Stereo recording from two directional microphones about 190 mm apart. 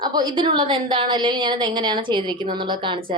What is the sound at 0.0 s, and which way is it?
A woman's voice, 20° right (ahead or behind).